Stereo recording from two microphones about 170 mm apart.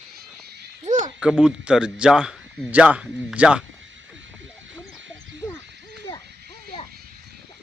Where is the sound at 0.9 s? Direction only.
45° right (ahead or behind).